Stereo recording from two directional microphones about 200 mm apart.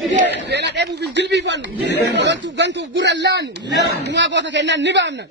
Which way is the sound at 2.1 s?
65° right (ahead or behind).